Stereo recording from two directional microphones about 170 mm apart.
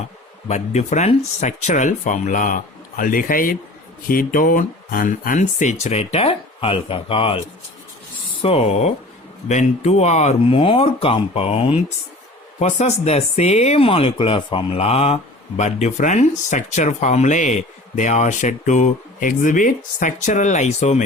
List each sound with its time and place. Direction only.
0.4 s speech: 40° left (ahead or behind)
8.4 s speech: 35° left (ahead or behind)